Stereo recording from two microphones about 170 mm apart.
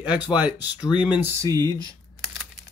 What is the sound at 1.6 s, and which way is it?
Speech, 25° left (ahead or behind).